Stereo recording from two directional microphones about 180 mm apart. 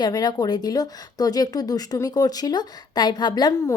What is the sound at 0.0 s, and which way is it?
Speech, 25° left (ahead or behind).